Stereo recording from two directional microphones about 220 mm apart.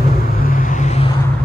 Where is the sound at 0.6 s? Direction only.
35° left (ahead or behind).